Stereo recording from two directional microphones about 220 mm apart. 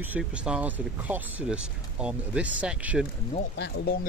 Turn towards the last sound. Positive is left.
turn(degrees=45)  # may be behind; listen again after turning